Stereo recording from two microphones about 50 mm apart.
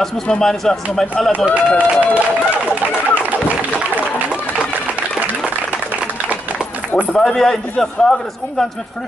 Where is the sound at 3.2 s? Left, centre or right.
Right.